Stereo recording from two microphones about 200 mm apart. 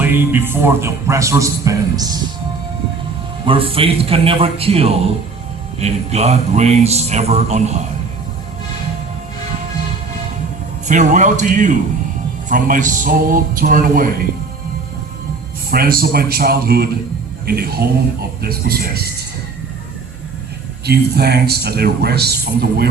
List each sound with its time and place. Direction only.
0.0 s a man's voice: 10° right (ahead or behind)
3.4 s a man's voice: 25° right (ahead or behind)
10.8 s a man's voice: 40° right (ahead or behind)
15.7 s a man's voice: 50° right (ahead or behind)
20.8 s a man's voice: 55° right (ahead or behind)